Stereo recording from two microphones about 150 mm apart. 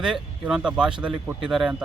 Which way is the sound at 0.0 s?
5° right (ahead or behind).